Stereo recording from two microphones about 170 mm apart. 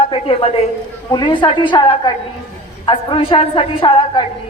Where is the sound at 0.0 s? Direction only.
30° left (ahead or behind).